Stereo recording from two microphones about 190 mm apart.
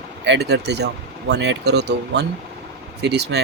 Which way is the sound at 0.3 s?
60° right (ahead or behind).